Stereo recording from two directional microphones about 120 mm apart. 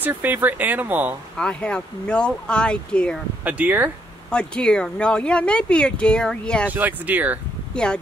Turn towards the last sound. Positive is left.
turn(degrees=5)  # may be behind; listen again after turning